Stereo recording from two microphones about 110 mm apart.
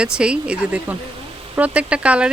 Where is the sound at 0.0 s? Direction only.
10° right (ahead or behind).